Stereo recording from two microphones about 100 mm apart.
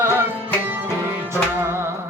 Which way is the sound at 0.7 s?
25° right (ahead or behind).